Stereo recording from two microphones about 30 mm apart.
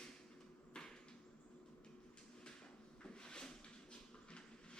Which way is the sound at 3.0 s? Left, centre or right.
Left.